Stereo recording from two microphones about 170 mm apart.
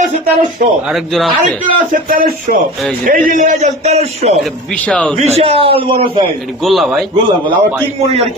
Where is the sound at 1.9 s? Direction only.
55° right (ahead or behind); by 4.3 s 40° right (ahead or behind).